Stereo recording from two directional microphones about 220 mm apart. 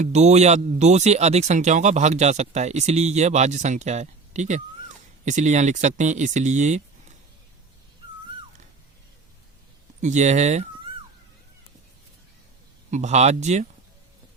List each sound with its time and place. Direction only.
0.0 s speech: 30° right (ahead or behind)
10.0 s speech: 30° right (ahead or behind)
12.9 s speech: 30° right (ahead or behind)